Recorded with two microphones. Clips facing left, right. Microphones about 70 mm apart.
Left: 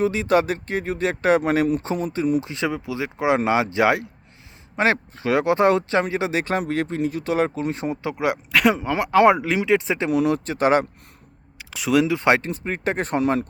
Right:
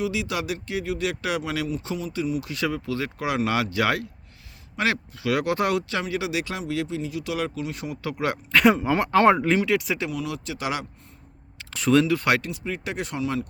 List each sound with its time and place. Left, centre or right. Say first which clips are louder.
0.0 s speech: left 8 dB; left
2.4 s speech: left 2 dB; left
8.5 s speech: right 2 dB; centre
9.6 s speech: left 3 dB; left
10.1 s speech: left 10 dB; left
11.7 s speech: even; centre
12.0 s speech: left 3 dB; left
12.5 s speech: left 6 dB; left